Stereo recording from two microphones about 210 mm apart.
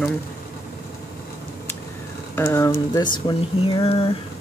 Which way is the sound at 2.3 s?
10° left (ahead or behind).